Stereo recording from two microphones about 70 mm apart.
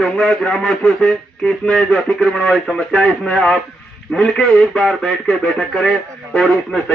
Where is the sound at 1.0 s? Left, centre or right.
Centre.